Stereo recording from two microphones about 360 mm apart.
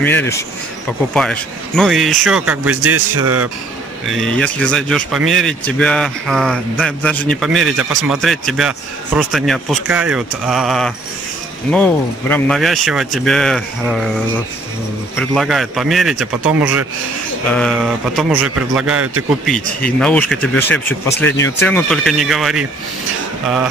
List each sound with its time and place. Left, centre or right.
0.0 s speech: centre
2.8 s a man's voice: right
4.1 s speech: centre
15.1 s speech: centre